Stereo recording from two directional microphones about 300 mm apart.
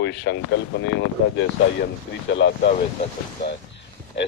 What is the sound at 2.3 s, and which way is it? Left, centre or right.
Speech, left.